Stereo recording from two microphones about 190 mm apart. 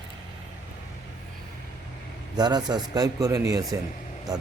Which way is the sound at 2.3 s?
20° right (ahead or behind).